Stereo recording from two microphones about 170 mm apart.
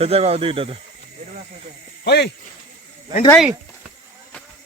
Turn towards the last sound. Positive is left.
turn(degrees=-25)  # may be behind; listen again after turning